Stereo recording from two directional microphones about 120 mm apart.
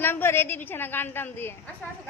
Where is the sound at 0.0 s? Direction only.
20° left (ahead or behind).